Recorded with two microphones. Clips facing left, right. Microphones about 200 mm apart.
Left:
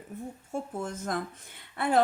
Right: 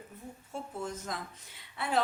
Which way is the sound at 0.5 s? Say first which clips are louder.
Left 4 dB; 50° left (ahead or behind).